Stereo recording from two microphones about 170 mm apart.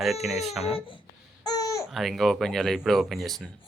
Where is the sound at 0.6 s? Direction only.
35° left (ahead or behind).